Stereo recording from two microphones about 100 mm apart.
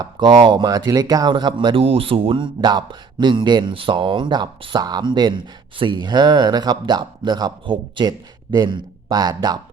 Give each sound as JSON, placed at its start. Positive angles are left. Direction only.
{"t": 0.0, "sound": "speech", "side_deg": -50}